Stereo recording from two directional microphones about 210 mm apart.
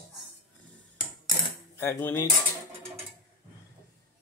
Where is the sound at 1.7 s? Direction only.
10° left (ahead or behind).